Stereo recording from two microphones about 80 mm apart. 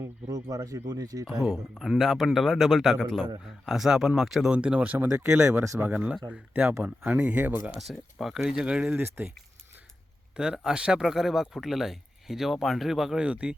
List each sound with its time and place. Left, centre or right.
0.0 s speech: right
1.3 s speech: centre
3.7 s speech: centre
4.5 s speech: centre
5.2 s speech: right
5.8 s speech: centre
7.7 s speech: centre; by 9.3 s right
10.3 s speech: centre